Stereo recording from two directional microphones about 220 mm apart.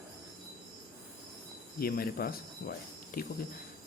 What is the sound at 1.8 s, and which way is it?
Speech, 45° left (ahead or behind).